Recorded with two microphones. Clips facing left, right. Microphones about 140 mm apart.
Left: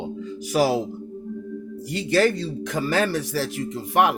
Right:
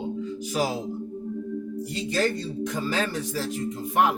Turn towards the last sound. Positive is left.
turn(degrees=75)  # may be behind; listen again after turning